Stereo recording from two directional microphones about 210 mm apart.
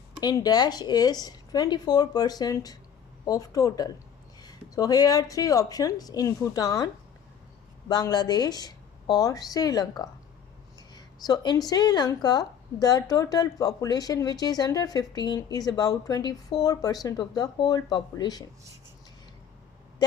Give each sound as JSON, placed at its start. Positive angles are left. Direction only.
{"t": 0.2, "sound": "a woman's voice", "side_deg": 20}
{"t": 20.0, "sound": "a woman's voice", "side_deg": 20}